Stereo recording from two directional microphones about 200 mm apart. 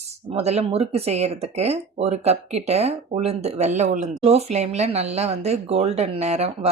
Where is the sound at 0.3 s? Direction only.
30° right (ahead or behind).